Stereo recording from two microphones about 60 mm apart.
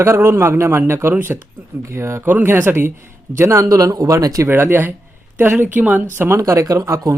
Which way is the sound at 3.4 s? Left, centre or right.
Right.